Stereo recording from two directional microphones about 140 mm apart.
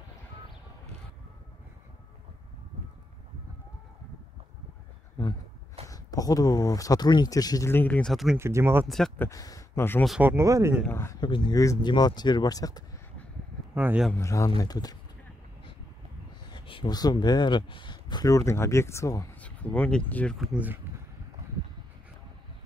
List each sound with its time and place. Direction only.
5.9 s speech: 25° left (ahead or behind); by 8.4 s centre (ahead or behind)
8.4 s speech: 20° right (ahead or behind)
8.8 s speech: centre (ahead or behind)
9.2 s speech: 25° left (ahead or behind)
10.2 s speech: 20° right (ahead or behind)
10.9 s speech: 15° left (ahead or behind)
11.1 s speech: 35° left (ahead or behind)
11.5 s speech: 25° left (ahead or behind)
13.7 s speech: 15° right (ahead or behind)
14.1 s speech: 20° left (ahead or behind)
16.4 s speech: 35° left (ahead or behind); by 19.2 s 20° left (ahead or behind)
19.3 s a sound: 10° left (ahead or behind)
20.1 s speech: 10° left (ahead or behind)
20.3 s speech: 10° right (ahead or behind)